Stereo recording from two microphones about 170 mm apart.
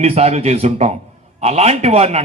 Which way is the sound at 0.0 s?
40° right (ahead or behind).